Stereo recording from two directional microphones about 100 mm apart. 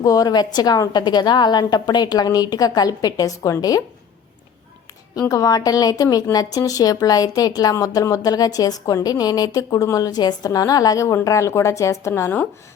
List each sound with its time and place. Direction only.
0.0 s speech: 40° left (ahead or behind)
5.3 s speech: 40° left (ahead or behind)